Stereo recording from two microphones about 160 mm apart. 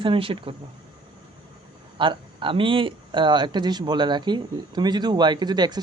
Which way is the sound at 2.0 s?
30° right (ahead or behind).